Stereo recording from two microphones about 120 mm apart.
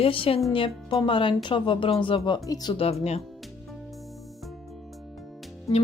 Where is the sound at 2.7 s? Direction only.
55° left (ahead or behind).